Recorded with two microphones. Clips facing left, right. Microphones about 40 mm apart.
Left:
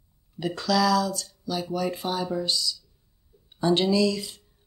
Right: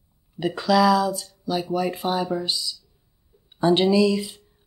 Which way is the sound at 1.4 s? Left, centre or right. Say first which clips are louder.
Right 4 dB; centre.